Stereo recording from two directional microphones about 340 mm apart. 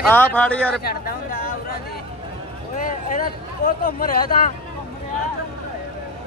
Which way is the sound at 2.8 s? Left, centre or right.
Left.